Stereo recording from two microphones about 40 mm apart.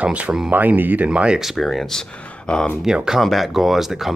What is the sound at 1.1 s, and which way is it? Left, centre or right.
Speech, right.